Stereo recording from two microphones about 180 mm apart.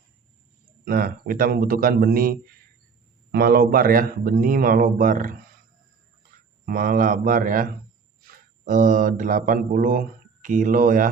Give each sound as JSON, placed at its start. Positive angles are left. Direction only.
{"t": 0.9, "sound": "speech", "side_deg": -55}
{"t": 3.3, "sound": "speech", "side_deg": -60}
{"t": 6.7, "sound": "speech", "side_deg": -50}